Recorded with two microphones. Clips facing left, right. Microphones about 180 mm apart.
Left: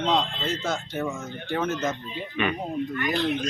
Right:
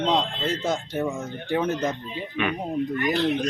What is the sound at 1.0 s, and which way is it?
Speech, 15° right (ahead or behind).